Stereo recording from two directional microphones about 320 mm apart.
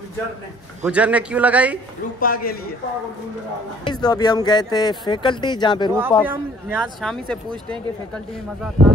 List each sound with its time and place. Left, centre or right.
0.8 s speech: centre
2.1 s a man's voice: left
3.8 s speech: centre
5.9 s speech: centre